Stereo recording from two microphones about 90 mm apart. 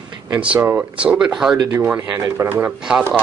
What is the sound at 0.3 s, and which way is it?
Speech, 15° right (ahead or behind).